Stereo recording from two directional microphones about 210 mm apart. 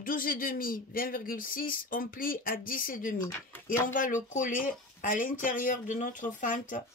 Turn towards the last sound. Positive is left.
turn(degrees=35)  # may be behind; listen again after turning